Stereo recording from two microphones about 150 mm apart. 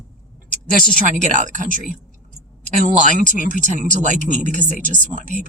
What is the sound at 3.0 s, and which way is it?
Speech, 55° right (ahead or behind).